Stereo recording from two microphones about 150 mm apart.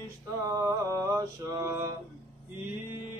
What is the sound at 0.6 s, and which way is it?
Mantra, 20° right (ahead or behind).